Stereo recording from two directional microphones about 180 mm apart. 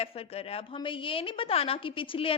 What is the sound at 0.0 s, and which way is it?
A woman's voice, 35° left (ahead or behind).